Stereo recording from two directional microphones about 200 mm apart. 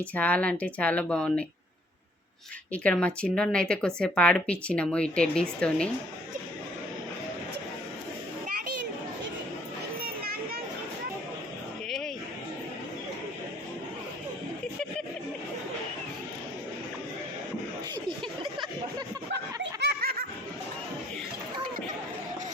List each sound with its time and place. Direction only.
0.0 s speech: 5° left (ahead or behind)
2.7 s a woman's voice: 5° left (ahead or behind)
11.9 s a sound: centre (ahead or behind)
19.8 s snicker: 50° right (ahead or behind)